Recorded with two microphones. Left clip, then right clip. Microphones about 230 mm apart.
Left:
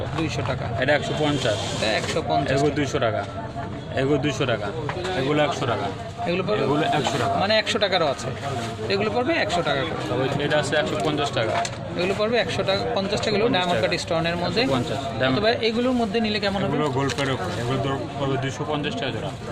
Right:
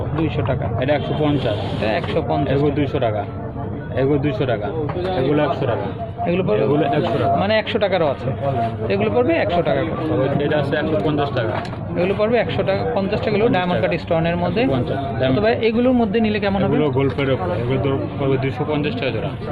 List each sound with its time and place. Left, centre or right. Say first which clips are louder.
0.8 s speech: right 1 dB; left
1.8 s speech: right 5 dB; centre
2.6 s speech: right 3 dB; left
6.2 s speech: right 5 dB; centre
10.4 s speech: right 2 dB; left
11.9 s speech: right 5 dB; centre
16.7 s speech: right 5 dB; left
18.7 s speech: right 4 dB; left